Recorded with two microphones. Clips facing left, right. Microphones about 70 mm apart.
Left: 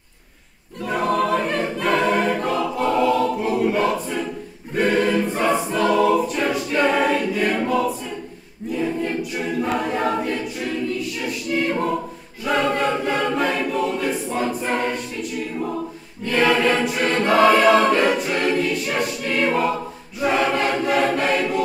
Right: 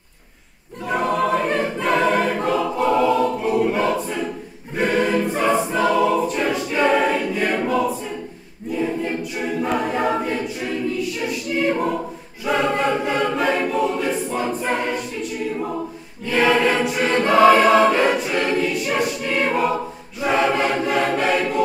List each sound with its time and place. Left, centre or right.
0.8 s choir: centre
8.7 s a capella: centre
12.4 s choir: centre
16.3 s choir: centre
17.7 s choir: centre
18.0 s choir: centre